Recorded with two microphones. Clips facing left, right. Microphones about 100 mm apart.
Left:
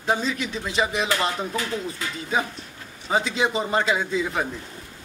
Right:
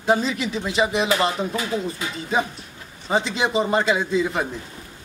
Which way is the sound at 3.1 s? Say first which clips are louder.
Right 1 dB; centre (ahead or behind).